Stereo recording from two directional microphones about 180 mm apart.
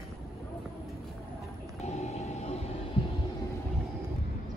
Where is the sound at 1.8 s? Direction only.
35° left (ahead or behind).